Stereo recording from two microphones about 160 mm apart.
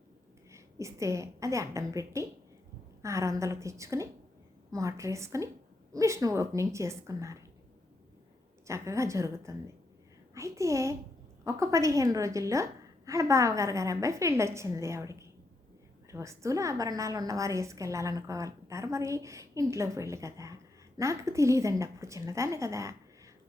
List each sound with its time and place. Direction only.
0.5 s a woman's voice: 20° right (ahead or behind)
8.6 s a woman's voice: 20° right (ahead or behind)